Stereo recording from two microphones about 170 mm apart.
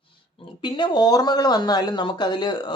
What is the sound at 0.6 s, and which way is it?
Speech, 25° left (ahead or behind).